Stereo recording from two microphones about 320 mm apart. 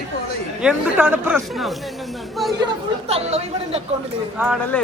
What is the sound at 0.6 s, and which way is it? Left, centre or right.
Speech, centre.